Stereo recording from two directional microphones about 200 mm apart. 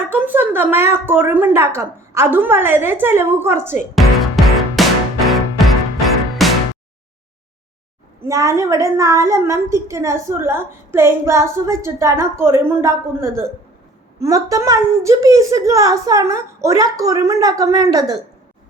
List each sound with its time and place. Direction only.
0.1 s a woman's voice: 10° right (ahead or behind)
3.9 s music: centre (ahead or behind)
8.2 s a woman's voice: 15° right (ahead or behind)